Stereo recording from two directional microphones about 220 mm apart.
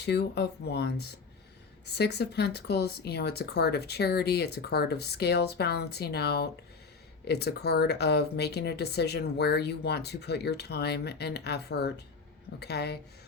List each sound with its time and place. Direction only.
0.0 s speech: 50° left (ahead or behind)